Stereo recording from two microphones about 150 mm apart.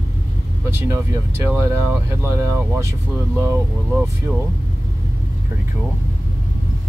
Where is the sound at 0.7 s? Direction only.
15° right (ahead or behind).